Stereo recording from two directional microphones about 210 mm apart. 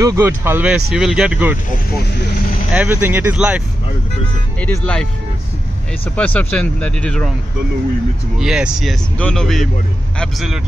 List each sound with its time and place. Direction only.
0.0 s speech: 15° right (ahead or behind)
2.1 s vehicle: 50° left (ahead or behind)
2.7 s speech: 10° right (ahead or behind)
4.6 s speech: 5° left (ahead or behind)
6.1 s speech: 5° left (ahead or behind)
8.4 s speech: 5° right (ahead or behind)